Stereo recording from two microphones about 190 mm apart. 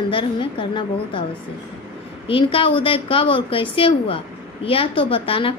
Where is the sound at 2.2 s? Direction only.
25° left (ahead or behind).